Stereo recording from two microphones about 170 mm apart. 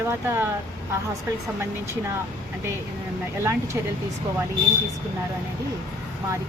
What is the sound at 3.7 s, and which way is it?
Speech, 15° right (ahead or behind).